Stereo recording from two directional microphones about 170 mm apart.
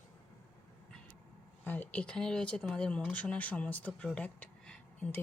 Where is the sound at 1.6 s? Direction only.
10° left (ahead or behind).